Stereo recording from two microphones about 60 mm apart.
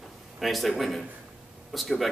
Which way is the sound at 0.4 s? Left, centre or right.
Centre.